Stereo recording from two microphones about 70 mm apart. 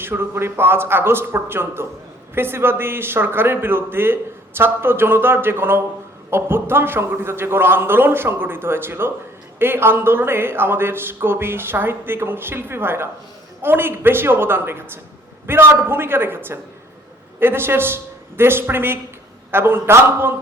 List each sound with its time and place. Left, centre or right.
0.0 s a man's voice: right